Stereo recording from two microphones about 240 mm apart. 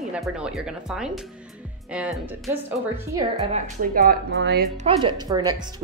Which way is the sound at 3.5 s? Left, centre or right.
Right.